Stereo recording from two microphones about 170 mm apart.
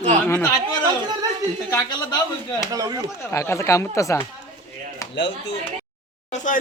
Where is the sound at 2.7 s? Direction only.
20° right (ahead or behind).